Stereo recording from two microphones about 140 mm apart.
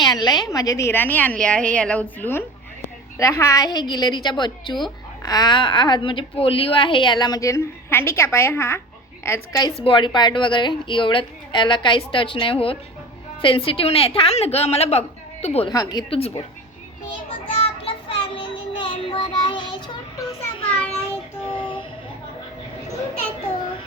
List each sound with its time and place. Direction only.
0.0 s a woman's voice: 30° left (ahead or behind); by 15.7 s 50° left (ahead or behind)
15.7 s a woman's voice: 25° left (ahead or behind)
16.0 s a woman's voice: 45° left (ahead or behind)
17.6 s child singing: 45° left (ahead or behind)